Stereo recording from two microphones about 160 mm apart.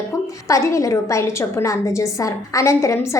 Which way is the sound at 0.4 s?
20° left (ahead or behind).